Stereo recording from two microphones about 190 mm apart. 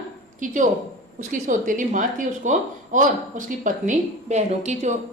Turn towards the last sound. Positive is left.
turn(degrees=-40)  # may be behind; listen again after turning